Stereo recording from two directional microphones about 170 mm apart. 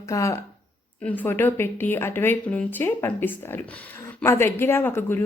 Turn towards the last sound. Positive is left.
turn(degrees=10)  # may be behind; listen again after turning